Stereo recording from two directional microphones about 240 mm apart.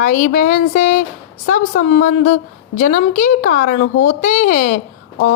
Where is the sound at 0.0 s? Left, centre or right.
Left.